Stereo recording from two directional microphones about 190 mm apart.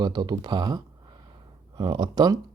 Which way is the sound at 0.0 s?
20° right (ahead or behind).